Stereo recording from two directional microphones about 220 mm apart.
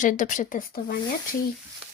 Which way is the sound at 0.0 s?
35° left (ahead or behind).